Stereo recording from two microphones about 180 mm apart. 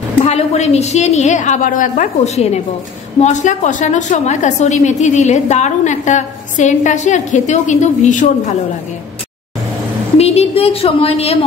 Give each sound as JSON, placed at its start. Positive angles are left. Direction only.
{"t": 0.2, "sound": "a woman's voice", "side_deg": 35}
{"t": 10.1, "sound": "a woman's voice", "side_deg": 35}